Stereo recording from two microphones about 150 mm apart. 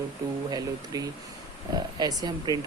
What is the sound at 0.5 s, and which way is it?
Speech, 25° right (ahead or behind).